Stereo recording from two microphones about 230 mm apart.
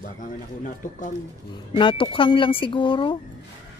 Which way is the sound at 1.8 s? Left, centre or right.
Left.